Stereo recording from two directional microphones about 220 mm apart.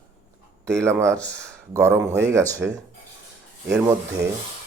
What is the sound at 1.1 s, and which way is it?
Speech, 5° left (ahead or behind).